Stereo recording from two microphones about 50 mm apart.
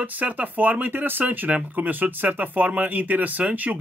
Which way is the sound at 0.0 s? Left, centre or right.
Right.